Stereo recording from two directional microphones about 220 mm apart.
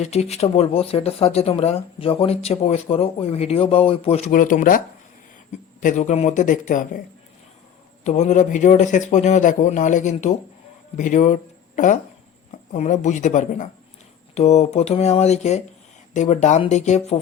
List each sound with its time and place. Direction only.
0.0 s speech: 30° left (ahead or behind)
8.0 s speech: 30° left (ahead or behind)
12.7 s speech: 30° left (ahead or behind)